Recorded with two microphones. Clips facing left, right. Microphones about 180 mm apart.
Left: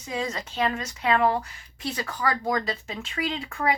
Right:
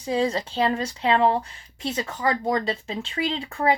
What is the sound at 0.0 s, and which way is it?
Speech, 30° right (ahead or behind).